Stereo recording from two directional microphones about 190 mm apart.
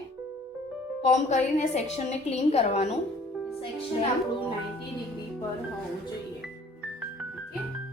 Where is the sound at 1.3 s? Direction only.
40° left (ahead or behind).